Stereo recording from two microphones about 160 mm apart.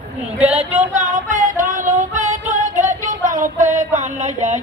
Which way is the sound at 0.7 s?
45° right (ahead or behind).